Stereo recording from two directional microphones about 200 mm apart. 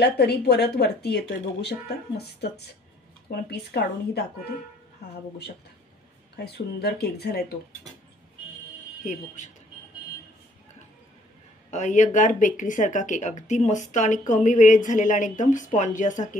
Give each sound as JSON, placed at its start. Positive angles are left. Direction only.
{"t": 0.0, "sound": "speech", "side_deg": 55}
{"t": 6.3, "sound": "speech", "side_deg": 55}
{"t": 9.0, "sound": "speech", "side_deg": 40}
{"t": 11.7, "sound": "speech", "side_deg": 35}